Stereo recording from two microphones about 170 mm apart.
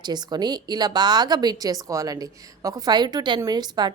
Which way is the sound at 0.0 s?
25° right (ahead or behind).